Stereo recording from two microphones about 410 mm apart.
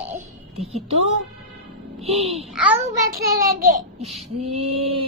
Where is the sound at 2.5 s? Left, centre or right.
Centre.